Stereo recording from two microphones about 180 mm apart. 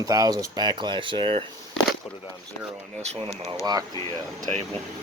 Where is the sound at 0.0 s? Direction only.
20° right (ahead or behind).